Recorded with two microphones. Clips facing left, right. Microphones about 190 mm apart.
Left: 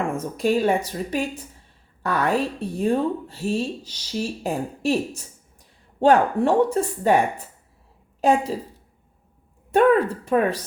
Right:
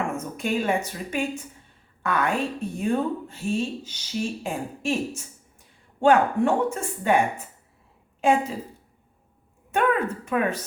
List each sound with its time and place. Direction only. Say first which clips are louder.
0.2 s speech: left 6 dB; 35° left (ahead or behind)
9.7 s speech: left 6 dB; 35° left (ahead or behind)